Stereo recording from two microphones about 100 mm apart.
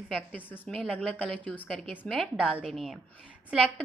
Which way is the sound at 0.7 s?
5° left (ahead or behind).